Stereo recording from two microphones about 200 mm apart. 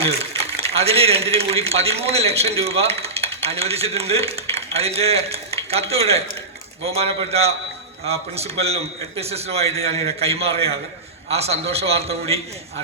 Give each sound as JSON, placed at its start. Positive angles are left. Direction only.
{"t": 0.0, "sound": "speech", "side_deg": -30}